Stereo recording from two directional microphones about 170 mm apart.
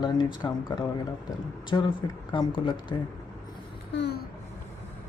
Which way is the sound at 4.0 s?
75° left (ahead or behind).